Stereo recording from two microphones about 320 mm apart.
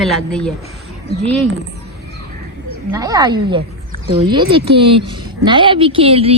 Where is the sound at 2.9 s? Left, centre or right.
Centre.